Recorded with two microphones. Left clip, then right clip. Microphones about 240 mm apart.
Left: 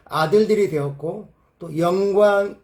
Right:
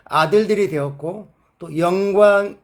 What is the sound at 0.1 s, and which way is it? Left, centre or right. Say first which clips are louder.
Speech: right 2 dB; right.